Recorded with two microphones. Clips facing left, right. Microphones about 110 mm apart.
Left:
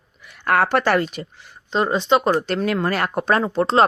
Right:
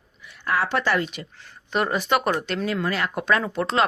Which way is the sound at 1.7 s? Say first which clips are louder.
Left 4 dB; 25° left (ahead or behind).